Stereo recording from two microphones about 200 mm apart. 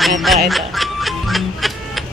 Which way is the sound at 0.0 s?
Centre (ahead or behind).